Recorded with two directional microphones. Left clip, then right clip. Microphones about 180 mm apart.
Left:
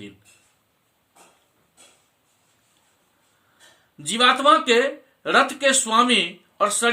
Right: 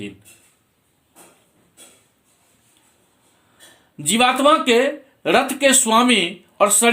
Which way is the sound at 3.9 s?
15° left (ahead or behind).